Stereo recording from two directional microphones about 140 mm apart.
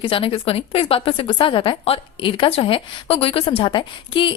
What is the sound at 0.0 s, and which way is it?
A woman's voice, 40° left (ahead or behind).